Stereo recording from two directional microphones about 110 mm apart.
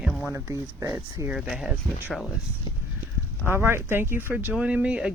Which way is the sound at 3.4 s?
20° right (ahead or behind).